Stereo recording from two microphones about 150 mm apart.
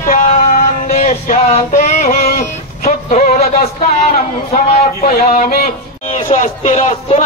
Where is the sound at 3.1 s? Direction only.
55° left (ahead or behind).